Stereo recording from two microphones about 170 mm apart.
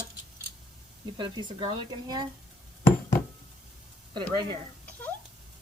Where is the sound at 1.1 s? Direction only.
30° right (ahead or behind).